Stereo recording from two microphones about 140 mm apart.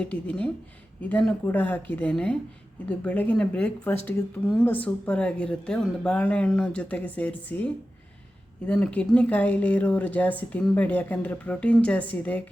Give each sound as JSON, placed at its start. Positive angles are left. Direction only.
{"t": 0.0, "sound": "speech", "side_deg": 10}